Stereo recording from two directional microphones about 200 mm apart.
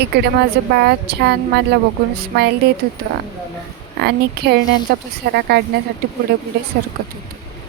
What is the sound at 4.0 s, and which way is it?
Speech, 55° right (ahead or behind).